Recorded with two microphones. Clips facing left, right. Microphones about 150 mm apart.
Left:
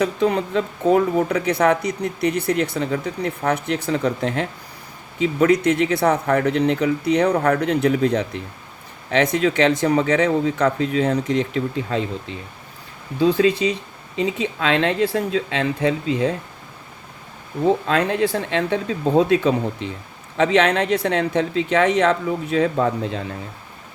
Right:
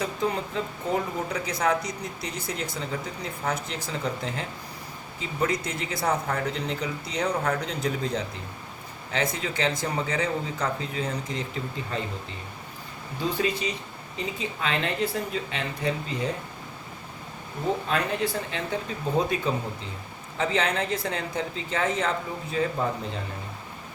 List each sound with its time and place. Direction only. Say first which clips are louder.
0.0 s speech: left 8 dB; 70° left (ahead or behind)
13.2 s speech: left 10 dB; 90° left
17.8 s speech: left 7 dB; 90° left